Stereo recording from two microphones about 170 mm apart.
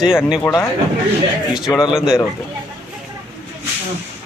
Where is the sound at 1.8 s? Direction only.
Centre (ahead or behind).